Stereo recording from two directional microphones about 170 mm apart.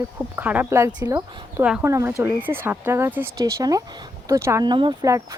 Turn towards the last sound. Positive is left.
turn(degrees=-20)  # may be behind; listen again after turning